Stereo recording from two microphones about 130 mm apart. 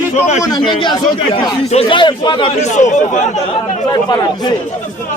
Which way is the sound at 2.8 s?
70° left (ahead or behind).